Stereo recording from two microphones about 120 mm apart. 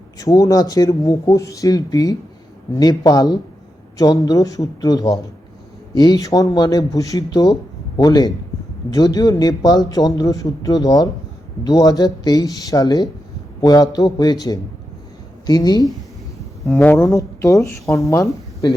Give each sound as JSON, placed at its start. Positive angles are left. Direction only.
{"t": 0.2, "sound": "a man's voice", "side_deg": 30}
{"t": 16.8, "sound": "speech", "side_deg": 15}
{"t": 17.1, "sound": "speech", "side_deg": 25}